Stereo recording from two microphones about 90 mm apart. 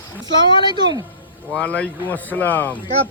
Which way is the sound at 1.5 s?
15° left (ahead or behind).